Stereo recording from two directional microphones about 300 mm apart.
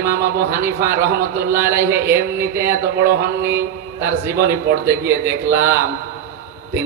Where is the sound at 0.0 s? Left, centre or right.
Right.